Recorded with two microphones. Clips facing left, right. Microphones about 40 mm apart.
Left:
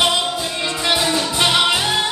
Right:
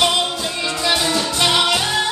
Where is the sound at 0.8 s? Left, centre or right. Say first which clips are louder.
Even; centre.